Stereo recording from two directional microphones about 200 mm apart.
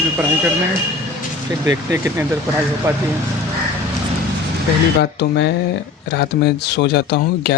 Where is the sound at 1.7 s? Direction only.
10° right (ahead or behind).